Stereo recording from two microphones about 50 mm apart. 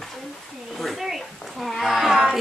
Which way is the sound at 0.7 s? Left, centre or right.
Centre.